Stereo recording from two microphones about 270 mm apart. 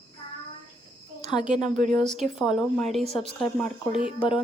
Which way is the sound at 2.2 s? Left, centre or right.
Centre.